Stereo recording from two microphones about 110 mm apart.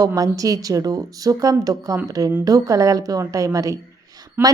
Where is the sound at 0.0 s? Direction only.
30° right (ahead or behind).